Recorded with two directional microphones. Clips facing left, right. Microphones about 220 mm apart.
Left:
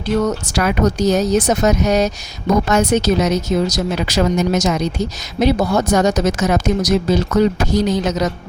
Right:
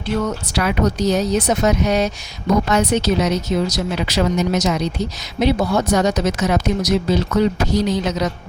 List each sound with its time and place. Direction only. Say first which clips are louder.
0.3 s speech: left 3 dB; 45° left (ahead or behind)